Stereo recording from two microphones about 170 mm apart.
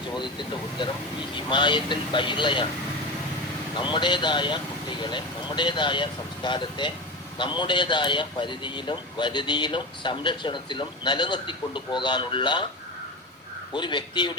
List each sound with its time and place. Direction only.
0.1 s a man's voice: 25° left (ahead or behind)
3.8 s a man's voice: 30° left (ahead or behind)
13.7 s a man's voice: 25° left (ahead or behind)